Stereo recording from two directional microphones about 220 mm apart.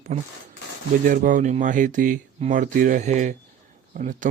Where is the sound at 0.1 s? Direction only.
30° right (ahead or behind).